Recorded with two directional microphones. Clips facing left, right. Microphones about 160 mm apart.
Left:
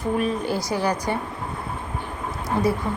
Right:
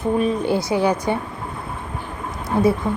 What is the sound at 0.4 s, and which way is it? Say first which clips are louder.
Speech: right 5 dB; 25° right (ahead or behind).